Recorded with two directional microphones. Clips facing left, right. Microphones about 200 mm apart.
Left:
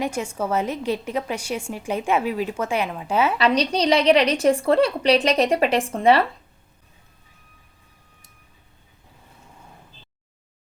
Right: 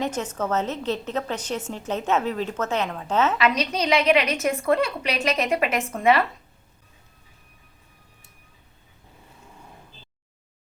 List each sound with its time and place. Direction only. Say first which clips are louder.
0.0 s a woman's voice: left 1 dB; 10° left (ahead or behind)
3.3 s a woman's voice: left 3 dB; 35° left (ahead or behind)